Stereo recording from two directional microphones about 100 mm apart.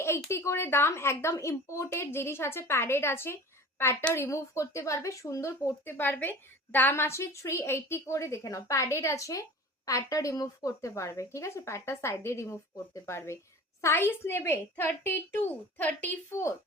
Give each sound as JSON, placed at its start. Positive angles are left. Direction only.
{"t": 0.3, "sound": "speech", "side_deg": 25}
{"t": 16.3, "sound": "speech", "side_deg": 30}